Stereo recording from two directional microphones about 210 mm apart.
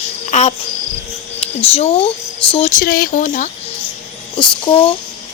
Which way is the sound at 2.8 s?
45° left (ahead or behind).